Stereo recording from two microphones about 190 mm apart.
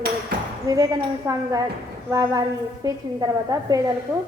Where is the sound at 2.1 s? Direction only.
20° right (ahead or behind).